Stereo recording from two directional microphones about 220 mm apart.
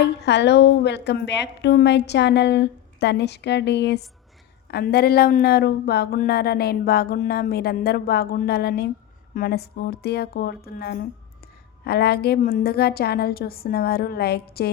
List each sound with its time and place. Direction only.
0.0 s speech: 50° left (ahead or behind)